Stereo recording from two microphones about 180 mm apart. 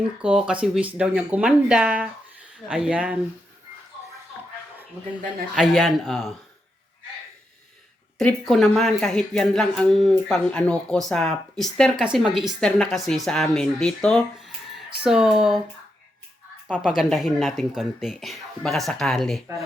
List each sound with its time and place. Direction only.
0.2 s speech: 5° right (ahead or behind)
5.5 s speech: centre (ahead or behind)
8.2 s speech: 5° left (ahead or behind)
17.0 s speech: centre (ahead or behind)